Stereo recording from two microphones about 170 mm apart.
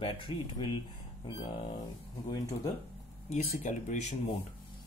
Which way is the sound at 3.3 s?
45° left (ahead or behind).